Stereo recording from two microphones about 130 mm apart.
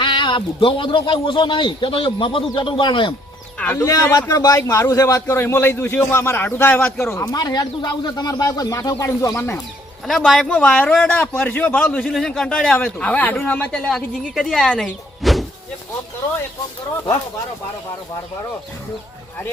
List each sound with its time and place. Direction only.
0.0 s speech: 35° left (ahead or behind)
3.8 s speech: 25° left (ahead or behind)
7.1 s speech: 25° left (ahead or behind)
10.1 s speech: centre (ahead or behind)
15.2 s a sound: centre (ahead or behind)